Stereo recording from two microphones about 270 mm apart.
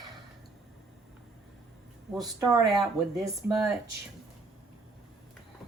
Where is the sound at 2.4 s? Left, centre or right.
Centre.